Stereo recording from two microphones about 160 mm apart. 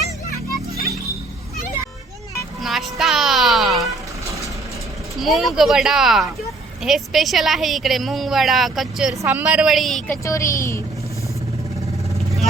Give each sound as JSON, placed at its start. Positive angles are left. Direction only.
{"t": 2.6, "sound": "a sound", "side_deg": 0}
{"t": 5.1, "sound": "a woman's voice", "side_deg": 0}
{"t": 10.2, "sound": "speech", "side_deg": 20}